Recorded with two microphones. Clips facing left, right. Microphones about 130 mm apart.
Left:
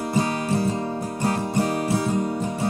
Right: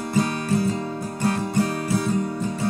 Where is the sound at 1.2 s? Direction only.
25° left (ahead or behind).